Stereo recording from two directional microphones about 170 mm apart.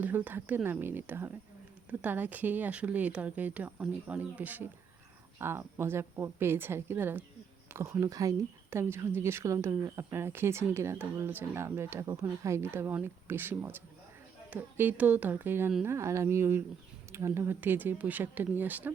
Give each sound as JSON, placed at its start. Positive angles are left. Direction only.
{"t": 0.0, "sound": "speech", "side_deg": -10}